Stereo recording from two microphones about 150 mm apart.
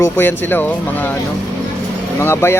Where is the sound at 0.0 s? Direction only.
15° left (ahead or behind).